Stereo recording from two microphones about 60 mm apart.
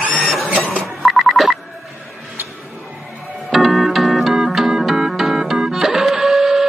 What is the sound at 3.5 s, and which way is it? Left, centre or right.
Music, centre.